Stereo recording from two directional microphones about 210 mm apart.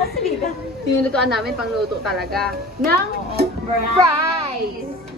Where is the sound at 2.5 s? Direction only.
50° right (ahead or behind).